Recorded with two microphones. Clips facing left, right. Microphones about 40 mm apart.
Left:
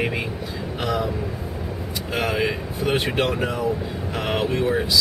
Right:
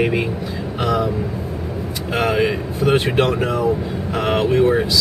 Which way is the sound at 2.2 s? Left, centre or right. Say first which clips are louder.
Right 5 dB; centre.